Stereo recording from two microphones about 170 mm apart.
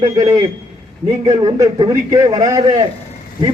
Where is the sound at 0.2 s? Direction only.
20° right (ahead or behind).